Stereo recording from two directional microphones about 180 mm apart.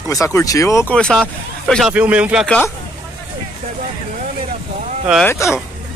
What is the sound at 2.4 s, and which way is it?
Speech, 5° left (ahead or behind).